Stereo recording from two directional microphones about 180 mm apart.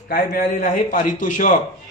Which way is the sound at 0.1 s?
55° left (ahead or behind).